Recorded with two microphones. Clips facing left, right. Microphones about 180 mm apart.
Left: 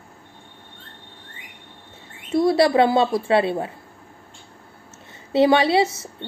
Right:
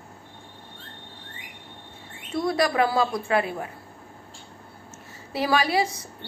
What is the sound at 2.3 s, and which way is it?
A woman's voice, 30° left (ahead or behind).